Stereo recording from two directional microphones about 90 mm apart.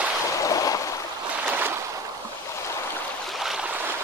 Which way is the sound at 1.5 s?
20° right (ahead or behind).